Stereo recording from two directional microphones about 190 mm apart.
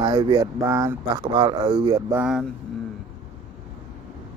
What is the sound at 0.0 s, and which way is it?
Speech, 25° right (ahead or behind).